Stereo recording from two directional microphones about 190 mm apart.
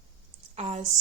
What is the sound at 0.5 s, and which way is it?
Speech, 35° right (ahead or behind).